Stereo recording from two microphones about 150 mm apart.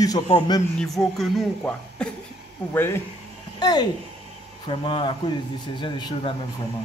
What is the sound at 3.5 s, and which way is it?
A man's voice, 30° left (ahead or behind).